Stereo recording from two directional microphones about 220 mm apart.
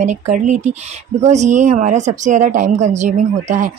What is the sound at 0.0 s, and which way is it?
A woman's voice, 35° right (ahead or behind).